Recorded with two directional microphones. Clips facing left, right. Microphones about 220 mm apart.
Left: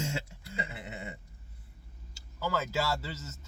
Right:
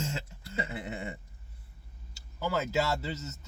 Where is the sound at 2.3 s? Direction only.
20° right (ahead or behind).